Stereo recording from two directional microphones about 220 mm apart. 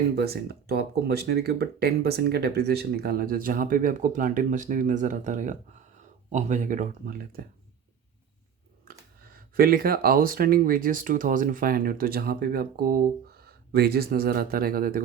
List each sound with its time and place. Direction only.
0.2 s speech: 45° right (ahead or behind)
8.9 s a sound: 45° right (ahead or behind)
9.6 s speech: 40° right (ahead or behind)